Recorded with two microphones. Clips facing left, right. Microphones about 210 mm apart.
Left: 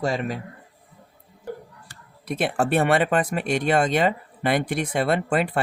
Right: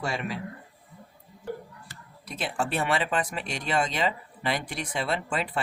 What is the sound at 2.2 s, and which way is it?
Speech, 60° left (ahead or behind).